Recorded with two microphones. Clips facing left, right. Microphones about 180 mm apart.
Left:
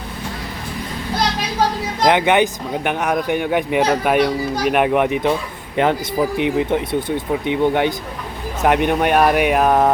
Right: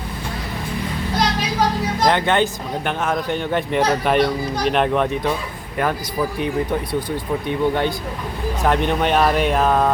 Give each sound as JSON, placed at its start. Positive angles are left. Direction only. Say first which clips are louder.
{"t": 2.0, "sound": "speech", "louder": "left 4 dB", "side_deg": 15}